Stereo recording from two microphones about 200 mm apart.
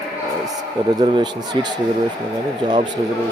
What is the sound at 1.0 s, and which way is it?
Speech, 20° right (ahead or behind).